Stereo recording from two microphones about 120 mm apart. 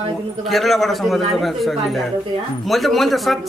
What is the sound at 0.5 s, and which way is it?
A man's voice, centre (ahead or behind).